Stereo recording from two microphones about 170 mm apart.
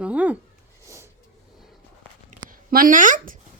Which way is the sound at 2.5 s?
55° right (ahead or behind).